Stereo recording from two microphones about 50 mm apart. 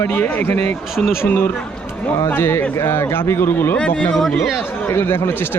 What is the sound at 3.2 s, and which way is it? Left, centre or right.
Speech, left.